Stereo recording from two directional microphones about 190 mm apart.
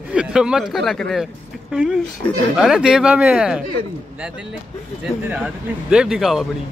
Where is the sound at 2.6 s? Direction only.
5° right (ahead or behind).